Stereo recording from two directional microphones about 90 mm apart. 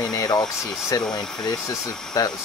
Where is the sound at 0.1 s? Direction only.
35° left (ahead or behind).